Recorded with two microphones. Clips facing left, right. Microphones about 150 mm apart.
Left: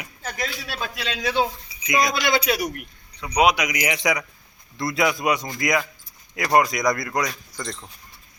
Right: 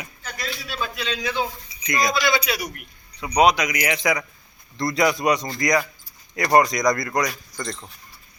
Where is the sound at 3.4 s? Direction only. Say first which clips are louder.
Right 1 dB; 10° left (ahead or behind).